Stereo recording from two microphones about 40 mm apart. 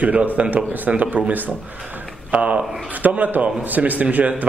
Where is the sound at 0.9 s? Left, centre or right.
Right.